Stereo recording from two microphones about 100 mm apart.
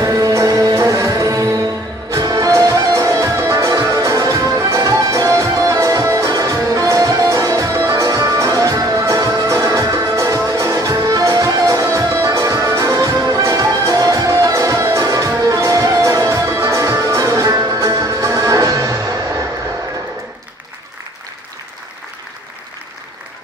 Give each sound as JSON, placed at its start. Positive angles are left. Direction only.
{"t": 0.0, "sound": "music", "side_deg": -35}